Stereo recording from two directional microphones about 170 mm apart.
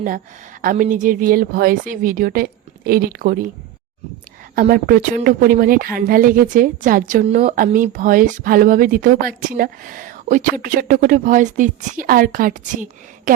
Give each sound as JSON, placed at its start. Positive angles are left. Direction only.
{"t": 0.6, "sound": "speech", "side_deg": -50}
{"t": 4.7, "sound": "speech", "side_deg": -55}